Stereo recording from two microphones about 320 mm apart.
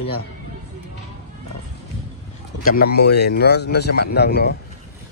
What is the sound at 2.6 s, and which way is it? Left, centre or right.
A man's voice, left.